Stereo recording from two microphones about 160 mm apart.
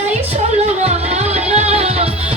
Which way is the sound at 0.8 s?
45° right (ahead or behind).